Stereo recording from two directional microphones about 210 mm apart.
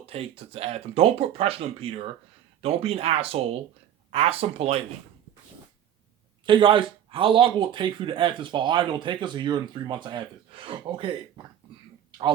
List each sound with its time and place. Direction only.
0.0 s speech: 25° right (ahead or behind)
6.4 s speech: 25° right (ahead or behind)